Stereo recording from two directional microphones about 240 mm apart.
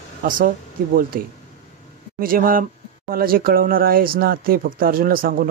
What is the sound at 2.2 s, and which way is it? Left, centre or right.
Speech, right.